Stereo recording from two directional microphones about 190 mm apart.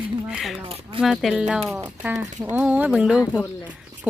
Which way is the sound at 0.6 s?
30° right (ahead or behind).